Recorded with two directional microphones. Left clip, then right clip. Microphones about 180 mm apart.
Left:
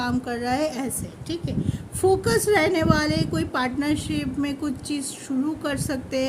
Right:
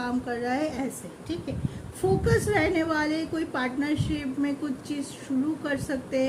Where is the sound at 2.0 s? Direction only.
55° left (ahead or behind).